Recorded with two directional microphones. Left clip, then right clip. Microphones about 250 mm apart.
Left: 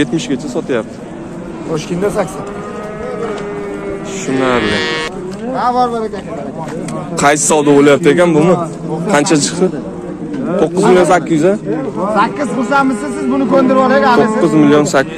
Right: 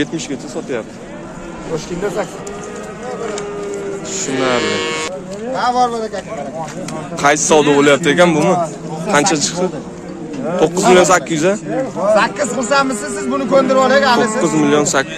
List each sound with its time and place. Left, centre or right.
0.0 s a man's voice: centre
4.6 s a man's voice: right
5.6 s speech: right
7.2 s a man's voice: left
7.6 s a man's voice: centre
9.1 s a man's voice: centre
10.9 s speech: centre
12.1 s a man's voice: right
14.4 s a man's voice: centre